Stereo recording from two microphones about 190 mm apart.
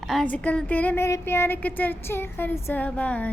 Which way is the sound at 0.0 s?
Centre (ahead or behind).